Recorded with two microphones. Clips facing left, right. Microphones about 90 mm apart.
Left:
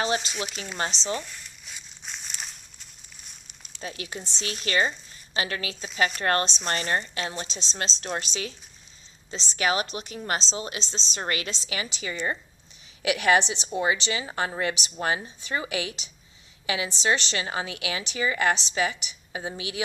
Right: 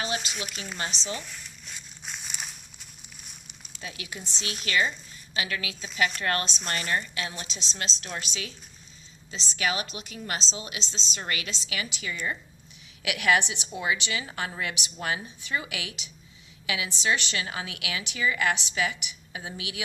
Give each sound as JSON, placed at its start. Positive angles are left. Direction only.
{"t": 0.2, "sound": "speech", "side_deg": -5}
{"t": 1.1, "sound": "crumpling", "side_deg": 0}
{"t": 3.8, "sound": "a woman's voice", "side_deg": 35}
{"t": 4.2, "sound": "speech", "side_deg": -10}
{"t": 4.6, "sound": "a woman's voice", "side_deg": 35}